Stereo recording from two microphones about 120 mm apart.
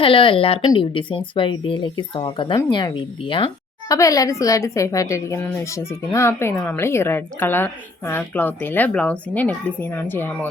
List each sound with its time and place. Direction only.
0.0 s speech: 45° left (ahead or behind)
3.8 s a woman's voice: 30° left (ahead or behind)